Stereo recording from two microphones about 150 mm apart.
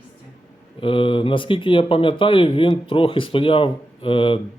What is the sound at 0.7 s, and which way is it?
Speech, 35° left (ahead or behind).